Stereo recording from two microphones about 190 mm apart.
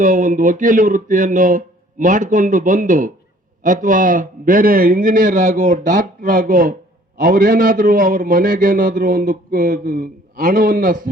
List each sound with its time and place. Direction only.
0.0 s a man's voice: 45° right (ahead or behind)